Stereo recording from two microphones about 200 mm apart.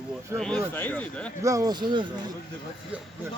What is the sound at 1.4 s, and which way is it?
Speech, 15° right (ahead or behind).